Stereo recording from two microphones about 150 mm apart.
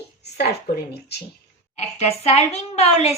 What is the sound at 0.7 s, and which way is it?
Speech, 90° left.